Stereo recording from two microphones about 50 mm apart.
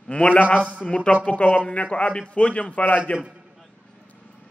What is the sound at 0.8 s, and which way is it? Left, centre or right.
A man's voice, left.